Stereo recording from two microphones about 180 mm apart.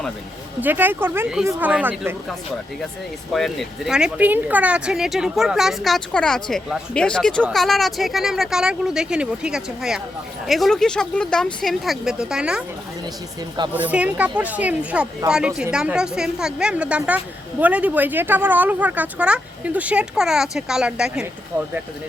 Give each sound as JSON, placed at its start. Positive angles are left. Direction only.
{"t": 0.6, "sound": "speech", "side_deg": -10}
{"t": 3.3, "sound": "speech", "side_deg": 0}
{"t": 13.7, "sound": "speech", "side_deg": -10}